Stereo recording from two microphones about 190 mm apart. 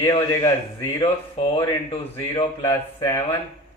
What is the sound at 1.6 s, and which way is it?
Speech, 25° left (ahead or behind).